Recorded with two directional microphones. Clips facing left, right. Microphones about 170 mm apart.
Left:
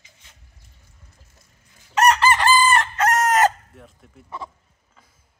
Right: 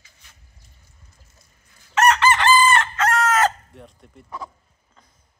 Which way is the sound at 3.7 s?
Centre (ahead or behind).